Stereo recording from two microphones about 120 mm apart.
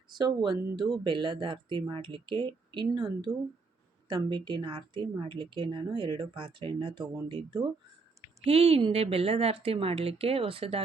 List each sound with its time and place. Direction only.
0.1 s speech: 40° right (ahead or behind)
8.4 s a woman's voice: 55° right (ahead or behind)